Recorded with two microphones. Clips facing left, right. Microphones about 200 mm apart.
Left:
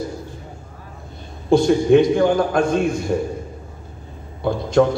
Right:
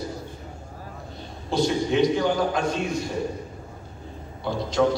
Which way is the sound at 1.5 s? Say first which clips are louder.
Left 9 dB; 50° left (ahead or behind).